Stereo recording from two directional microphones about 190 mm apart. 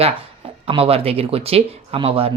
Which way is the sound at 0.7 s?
30° right (ahead or behind).